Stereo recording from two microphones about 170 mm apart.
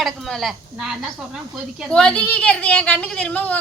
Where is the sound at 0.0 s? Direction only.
Centre (ahead or behind).